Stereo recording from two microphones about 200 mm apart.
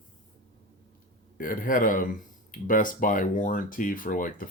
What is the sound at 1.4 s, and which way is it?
A man's voice, 45° left (ahead or behind).